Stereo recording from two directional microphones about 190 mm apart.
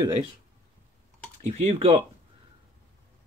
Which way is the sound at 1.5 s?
35° right (ahead or behind).